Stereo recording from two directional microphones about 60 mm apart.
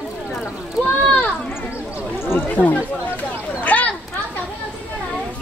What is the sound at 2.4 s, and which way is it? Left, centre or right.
Speech, left.